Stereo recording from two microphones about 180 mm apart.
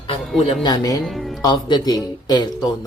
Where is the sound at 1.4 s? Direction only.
25° left (ahead or behind).